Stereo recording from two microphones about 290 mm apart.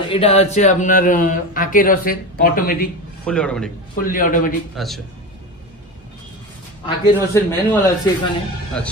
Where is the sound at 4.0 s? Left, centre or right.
Left.